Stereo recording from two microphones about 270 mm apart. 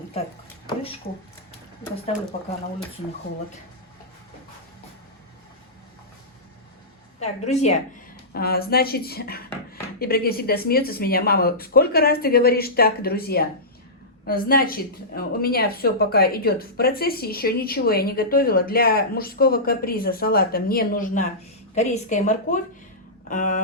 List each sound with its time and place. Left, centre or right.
7.2 s a woman's voice: left
8.3 s a woman's voice: left